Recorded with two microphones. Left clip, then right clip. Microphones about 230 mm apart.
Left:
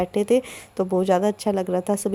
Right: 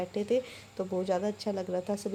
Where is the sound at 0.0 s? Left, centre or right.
Left.